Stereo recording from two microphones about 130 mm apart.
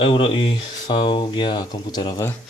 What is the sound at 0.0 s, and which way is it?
Speech, 40° left (ahead or behind).